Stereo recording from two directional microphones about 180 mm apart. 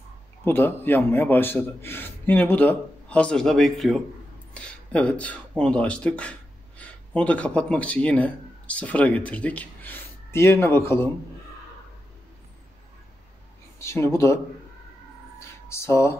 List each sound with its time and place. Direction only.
0.5 s a man's voice: 10° left (ahead or behind)
13.7 s a man's voice: 15° left (ahead or behind)
15.3 s a sound: 15° left (ahead or behind)